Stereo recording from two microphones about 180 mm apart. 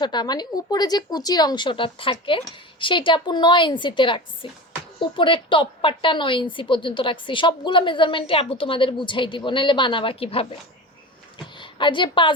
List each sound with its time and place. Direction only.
0.0 s a woman's voice: 25° left (ahead or behind)